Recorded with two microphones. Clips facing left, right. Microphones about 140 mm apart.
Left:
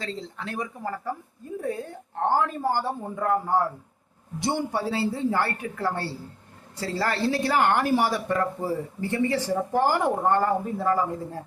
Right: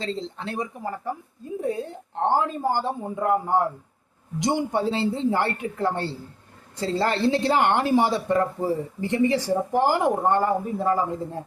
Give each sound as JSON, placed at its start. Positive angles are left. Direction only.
{"t": 0.0, "sound": "a woman's voice", "side_deg": -25}